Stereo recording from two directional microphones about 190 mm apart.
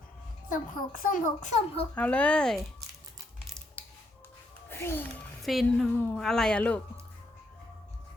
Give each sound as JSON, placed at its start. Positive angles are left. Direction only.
{"t": 0.4, "sound": "a child's voice", "side_deg": 45}
{"t": 2.0, "sound": "speech", "side_deg": 5}
{"t": 4.7, "sound": "speech", "side_deg": 10}
{"t": 5.4, "sound": "a woman's voice", "side_deg": 0}